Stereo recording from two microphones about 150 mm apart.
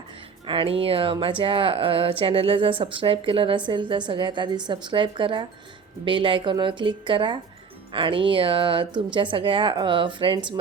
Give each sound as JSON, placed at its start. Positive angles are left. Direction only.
{"t": 0.4, "sound": "speech", "side_deg": -35}